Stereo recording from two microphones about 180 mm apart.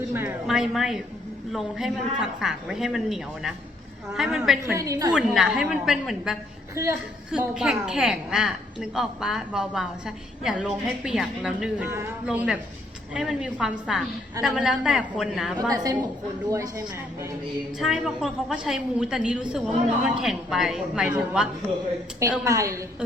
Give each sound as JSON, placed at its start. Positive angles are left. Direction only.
{"t": 0.1, "sound": "a woman's voice", "side_deg": -10}
{"t": 0.4, "sound": "a woman's voice", "side_deg": 0}
{"t": 4.7, "sound": "speech", "side_deg": -15}
{"t": 5.1, "sound": "a woman's voice", "side_deg": -5}
{"t": 15.7, "sound": "a woman's voice", "side_deg": -20}
{"t": 17.7, "sound": "a woman's voice", "side_deg": 0}
{"t": 22.4, "sound": "speech", "side_deg": -15}